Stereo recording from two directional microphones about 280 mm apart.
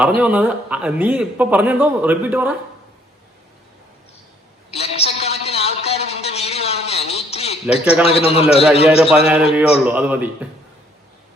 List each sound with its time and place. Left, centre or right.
0.2 s a man's voice: centre
4.7 s a sound: left
8.0 s a man's voice: left
9.1 s a man's voice: centre